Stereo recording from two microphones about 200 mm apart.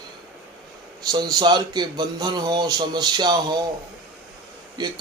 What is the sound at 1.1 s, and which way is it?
Speech, 20° right (ahead or behind).